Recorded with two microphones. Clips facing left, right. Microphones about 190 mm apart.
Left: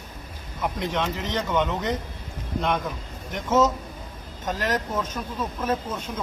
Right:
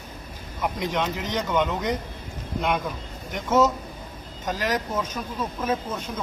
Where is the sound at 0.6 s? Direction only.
5° right (ahead or behind).